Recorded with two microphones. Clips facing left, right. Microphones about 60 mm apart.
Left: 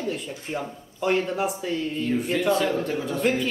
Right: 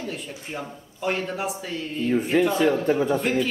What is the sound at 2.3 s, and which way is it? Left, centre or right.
Speech, right.